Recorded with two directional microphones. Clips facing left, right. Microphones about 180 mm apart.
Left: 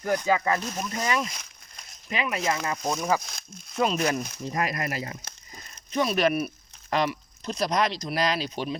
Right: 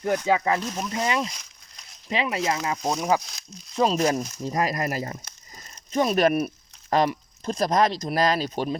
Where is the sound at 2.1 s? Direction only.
30° right (ahead or behind).